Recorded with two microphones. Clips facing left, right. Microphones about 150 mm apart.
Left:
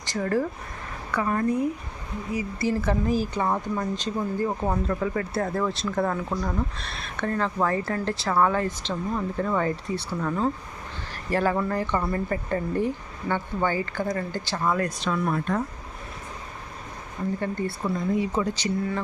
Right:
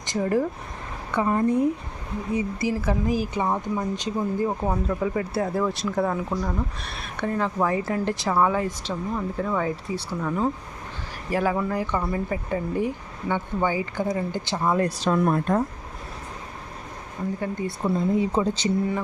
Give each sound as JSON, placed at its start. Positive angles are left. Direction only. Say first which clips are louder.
{"t": 0.0, "sound": "speech", "louder": "right 2 dB", "side_deg": -15}
{"t": 2.6, "sound": "speech", "louder": "left 2 dB", "side_deg": -10}
{"t": 14.8, "sound": "speech", "louder": "right 4 dB", "side_deg": -35}
{"t": 17.4, "sound": "speech", "louder": "even", "side_deg": -10}
{"t": 17.7, "sound": "speech", "louder": "right 7 dB", "side_deg": -25}